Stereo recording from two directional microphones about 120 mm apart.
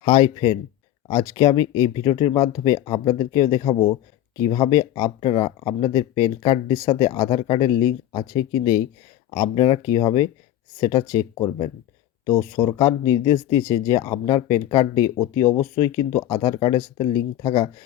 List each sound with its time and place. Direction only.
0.0 s a man's voice: 45° left (ahead or behind)
1.0 s speech: 35° left (ahead or behind)
3.3 s speech: 35° left (ahead or behind)
5.3 s speech: 45° left (ahead or behind)